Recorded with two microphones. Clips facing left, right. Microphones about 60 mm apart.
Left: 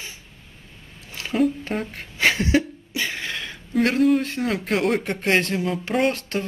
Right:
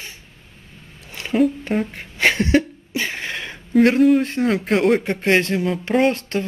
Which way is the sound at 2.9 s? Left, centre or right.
Right.